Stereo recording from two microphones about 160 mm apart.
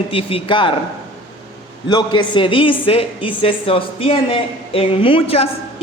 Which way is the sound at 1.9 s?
30° left (ahead or behind).